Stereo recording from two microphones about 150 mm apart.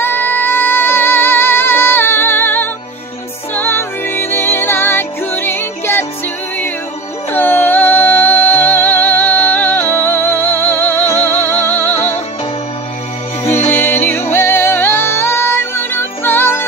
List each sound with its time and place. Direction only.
0.0 s music: 15° left (ahead or behind)
7.3 s music: 15° left (ahead or behind)
13.4 s music: 15° left (ahead or behind)